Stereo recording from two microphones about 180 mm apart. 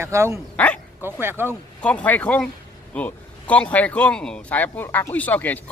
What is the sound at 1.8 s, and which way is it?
Speech, 5° left (ahead or behind).